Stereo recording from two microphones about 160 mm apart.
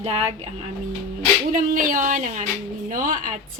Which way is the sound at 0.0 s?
40° right (ahead or behind).